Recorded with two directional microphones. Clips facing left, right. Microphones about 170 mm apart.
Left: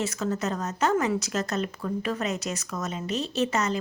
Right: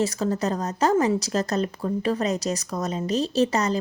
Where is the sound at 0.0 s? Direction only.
35° right (ahead or behind).